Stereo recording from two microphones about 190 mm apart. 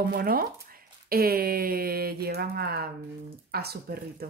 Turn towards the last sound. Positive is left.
turn(degrees=-55)  # may be behind; listen again after turning